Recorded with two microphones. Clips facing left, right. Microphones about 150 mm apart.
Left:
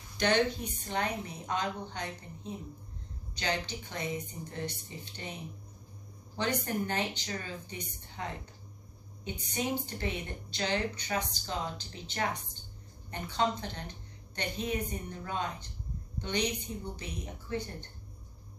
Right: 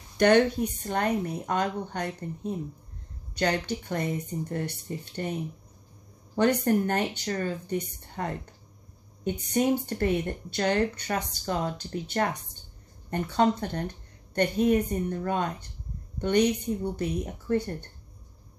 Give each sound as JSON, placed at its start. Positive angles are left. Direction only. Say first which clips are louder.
{"t": 0.8, "sound": "speech", "louder": "right 5 dB", "side_deg": -50}
{"t": 6.3, "sound": "speech", "louder": "right 10 dB", "side_deg": -55}